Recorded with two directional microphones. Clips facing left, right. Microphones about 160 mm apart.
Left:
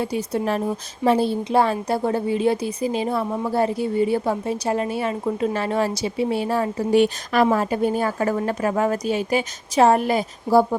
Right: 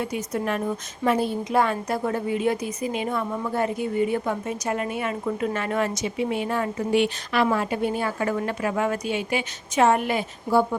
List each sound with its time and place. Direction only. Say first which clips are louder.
0.0 s a woman's voice: left 4 dB; 30° left (ahead or behind)